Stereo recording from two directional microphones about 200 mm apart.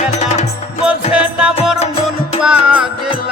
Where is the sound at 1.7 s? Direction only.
30° left (ahead or behind).